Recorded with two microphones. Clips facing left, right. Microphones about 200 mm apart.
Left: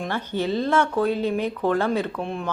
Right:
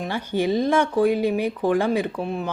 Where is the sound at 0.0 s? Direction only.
10° right (ahead or behind).